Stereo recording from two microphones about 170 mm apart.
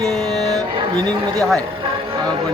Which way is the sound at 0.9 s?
25° right (ahead or behind).